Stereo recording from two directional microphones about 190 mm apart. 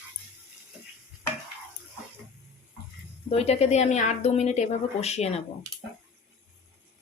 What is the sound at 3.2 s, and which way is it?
A woman's voice, 35° left (ahead or behind).